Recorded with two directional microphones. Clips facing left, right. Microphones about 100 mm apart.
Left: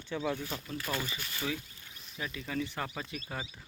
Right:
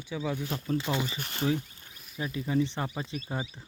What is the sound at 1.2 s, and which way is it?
Speech, 50° right (ahead or behind).